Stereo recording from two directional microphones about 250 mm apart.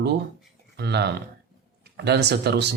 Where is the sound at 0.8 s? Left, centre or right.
Right.